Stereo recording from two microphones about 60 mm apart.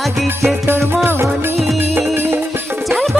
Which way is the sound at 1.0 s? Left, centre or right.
Right.